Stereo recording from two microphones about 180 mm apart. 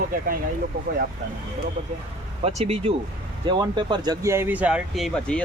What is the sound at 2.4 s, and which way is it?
Speech, 35° right (ahead or behind).